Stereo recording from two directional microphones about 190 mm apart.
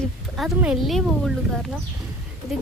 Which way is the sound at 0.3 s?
5° right (ahead or behind).